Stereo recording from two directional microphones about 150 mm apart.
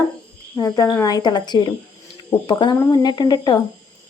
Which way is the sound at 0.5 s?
25° left (ahead or behind).